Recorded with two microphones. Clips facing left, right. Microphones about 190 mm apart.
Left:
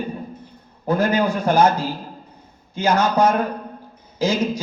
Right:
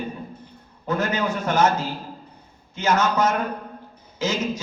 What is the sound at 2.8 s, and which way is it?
Speech, 30° left (ahead or behind).